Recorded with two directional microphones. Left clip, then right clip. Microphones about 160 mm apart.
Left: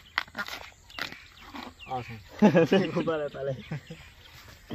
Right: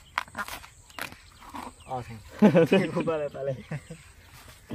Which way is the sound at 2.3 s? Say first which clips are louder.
Right 1 dB; 45° right (ahead or behind).